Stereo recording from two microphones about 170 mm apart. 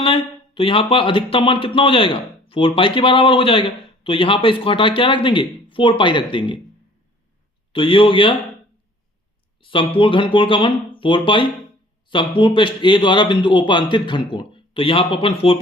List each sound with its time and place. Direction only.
0.0 s speech: 30° left (ahead or behind)
7.7 s speech: 30° left (ahead or behind)
9.6 s a man's voice: 30° left (ahead or behind)